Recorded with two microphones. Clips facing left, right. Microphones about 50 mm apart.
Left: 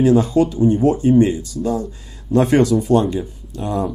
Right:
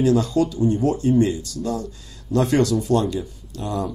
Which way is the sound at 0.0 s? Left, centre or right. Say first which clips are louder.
Left 4 dB; left.